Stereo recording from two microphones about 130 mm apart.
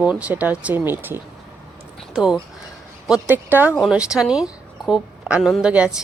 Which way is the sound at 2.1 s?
5° right (ahead or behind).